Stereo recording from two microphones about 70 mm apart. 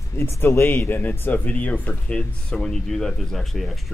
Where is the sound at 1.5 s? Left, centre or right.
Left.